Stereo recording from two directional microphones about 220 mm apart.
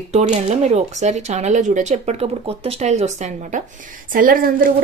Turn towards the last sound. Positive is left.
turn(degrees=-40)  # may be behind; listen again after turning